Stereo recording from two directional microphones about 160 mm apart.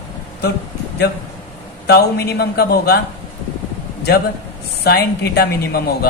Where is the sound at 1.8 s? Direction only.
90° left.